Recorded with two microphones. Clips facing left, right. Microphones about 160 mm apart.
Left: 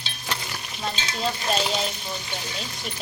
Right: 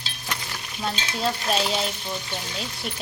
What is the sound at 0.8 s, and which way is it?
Stir, centre (ahead or behind).